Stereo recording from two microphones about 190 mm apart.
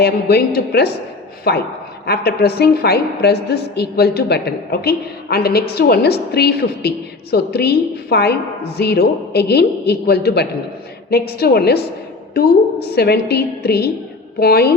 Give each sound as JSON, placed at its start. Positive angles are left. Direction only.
{"t": 0.0, "sound": "a woman's voice", "side_deg": 55}